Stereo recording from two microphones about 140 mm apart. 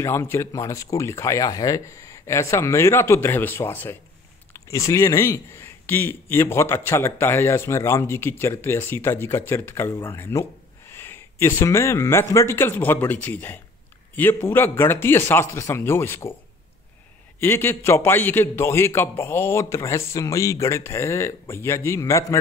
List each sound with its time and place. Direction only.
0.0 s a man's voice: 20° left (ahead or behind)
17.4 s a man's voice: 15° left (ahead or behind)